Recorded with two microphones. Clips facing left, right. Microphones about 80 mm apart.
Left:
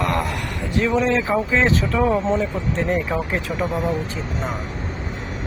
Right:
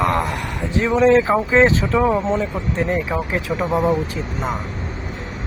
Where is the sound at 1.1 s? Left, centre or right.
Right.